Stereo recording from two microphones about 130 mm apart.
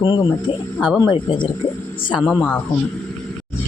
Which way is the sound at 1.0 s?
30° left (ahead or behind).